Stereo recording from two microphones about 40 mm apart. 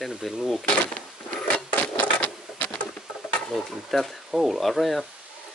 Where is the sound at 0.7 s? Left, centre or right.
Left.